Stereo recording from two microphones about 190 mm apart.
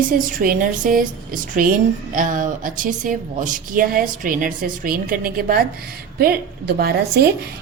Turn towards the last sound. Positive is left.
turn(degrees=-55)  # may be behind; listen again after turning